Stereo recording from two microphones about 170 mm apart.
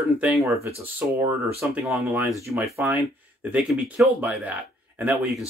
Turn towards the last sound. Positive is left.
turn(degrees=-10)  # may be behind; listen again after turning